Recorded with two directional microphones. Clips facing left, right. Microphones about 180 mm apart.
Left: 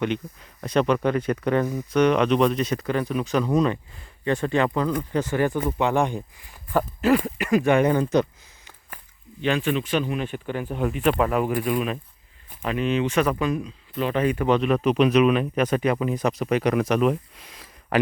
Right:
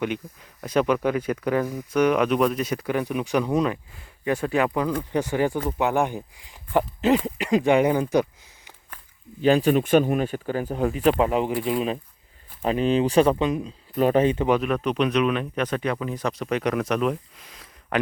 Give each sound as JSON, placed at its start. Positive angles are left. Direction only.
{"t": 0.6, "sound": "speech", "side_deg": -5}
{"t": 9.4, "sound": "speech", "side_deg": -40}
{"t": 13.9, "sound": "speech", "side_deg": -45}
{"t": 14.2, "sound": "speech", "side_deg": -25}
{"t": 14.4, "sound": "speech", "side_deg": -5}